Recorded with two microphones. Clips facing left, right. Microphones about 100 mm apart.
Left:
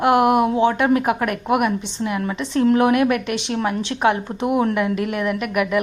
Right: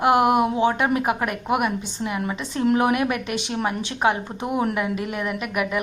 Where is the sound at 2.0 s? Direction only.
25° right (ahead or behind).